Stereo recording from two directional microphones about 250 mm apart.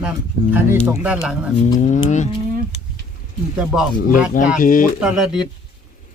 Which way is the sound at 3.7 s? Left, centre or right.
Centre.